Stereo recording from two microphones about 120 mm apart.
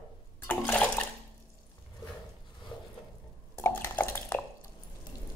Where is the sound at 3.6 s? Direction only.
20° left (ahead or behind).